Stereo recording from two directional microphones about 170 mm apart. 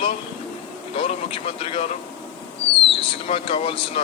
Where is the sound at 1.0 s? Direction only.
35° left (ahead or behind).